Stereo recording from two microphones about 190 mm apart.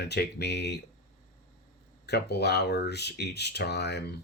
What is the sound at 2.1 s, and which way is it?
Speech, 60° left (ahead or behind).